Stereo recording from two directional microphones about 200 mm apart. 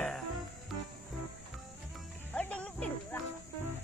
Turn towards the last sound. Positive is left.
turn(degrees=5)  # may be behind; listen again after turning